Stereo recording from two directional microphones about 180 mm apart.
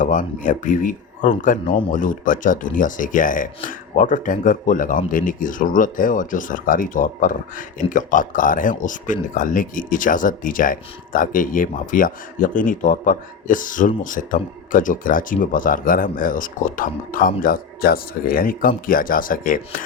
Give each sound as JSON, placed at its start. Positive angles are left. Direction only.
{"t": 0.0, "sound": "speech", "side_deg": 45}